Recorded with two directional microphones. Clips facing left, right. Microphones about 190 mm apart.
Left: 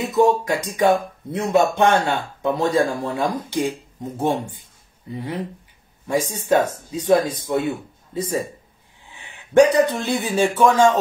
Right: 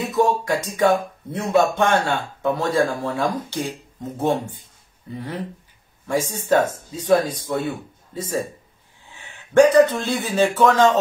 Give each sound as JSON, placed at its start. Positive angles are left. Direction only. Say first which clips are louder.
{"t": 0.1, "sound": "a man's voice", "louder": "left 3 dB", "side_deg": 20}